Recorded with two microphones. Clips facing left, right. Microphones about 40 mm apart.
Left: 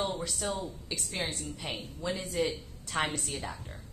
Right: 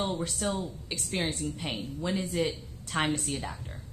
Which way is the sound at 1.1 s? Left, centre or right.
Centre.